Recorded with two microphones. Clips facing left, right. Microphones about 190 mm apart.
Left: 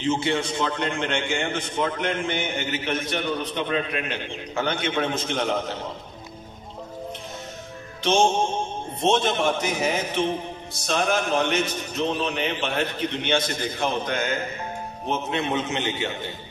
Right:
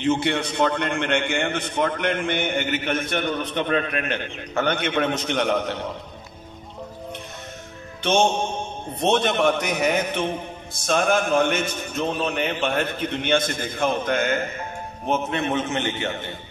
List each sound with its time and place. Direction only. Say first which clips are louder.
0.0 s a man's voice: right 2 dB; 60° right (ahead or behind)
8.0 s a man's voice: even; 60° right (ahead or behind)